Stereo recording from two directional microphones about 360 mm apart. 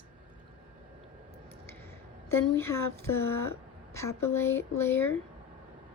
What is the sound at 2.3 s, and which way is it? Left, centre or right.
A woman's voice, centre.